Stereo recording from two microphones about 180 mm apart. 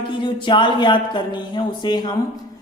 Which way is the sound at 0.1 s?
25° left (ahead or behind).